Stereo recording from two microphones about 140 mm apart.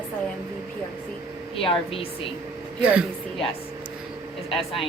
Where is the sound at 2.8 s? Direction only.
10° right (ahead or behind).